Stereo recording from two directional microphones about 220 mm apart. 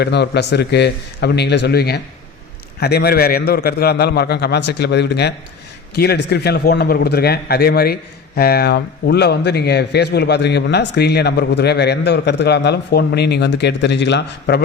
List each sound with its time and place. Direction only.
0.0 s speech: 50° left (ahead or behind)